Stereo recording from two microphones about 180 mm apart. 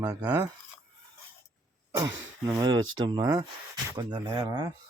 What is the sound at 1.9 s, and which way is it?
Speech, 20° right (ahead or behind).